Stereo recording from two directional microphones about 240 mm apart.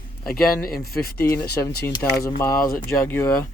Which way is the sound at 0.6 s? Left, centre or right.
Left.